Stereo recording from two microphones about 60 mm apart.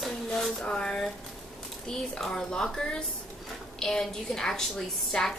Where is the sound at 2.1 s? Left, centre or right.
Centre.